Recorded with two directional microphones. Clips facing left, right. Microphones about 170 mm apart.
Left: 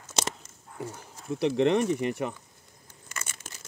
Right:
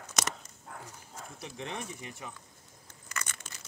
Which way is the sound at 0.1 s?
30° left (ahead or behind).